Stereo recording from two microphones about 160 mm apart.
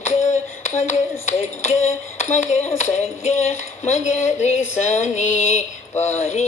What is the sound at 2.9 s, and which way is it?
Music, 45° left (ahead or behind).